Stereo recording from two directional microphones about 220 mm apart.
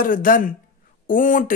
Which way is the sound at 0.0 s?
40° left (ahead or behind).